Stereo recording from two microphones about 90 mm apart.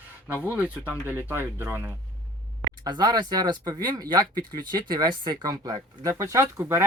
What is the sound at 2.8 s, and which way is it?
Speech, 50° right (ahead or behind).